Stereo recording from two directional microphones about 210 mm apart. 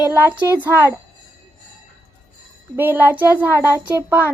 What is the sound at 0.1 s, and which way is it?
Speech, 10° right (ahead or behind).